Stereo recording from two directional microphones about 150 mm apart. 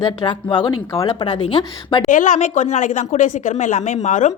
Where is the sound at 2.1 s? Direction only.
60° left (ahead or behind).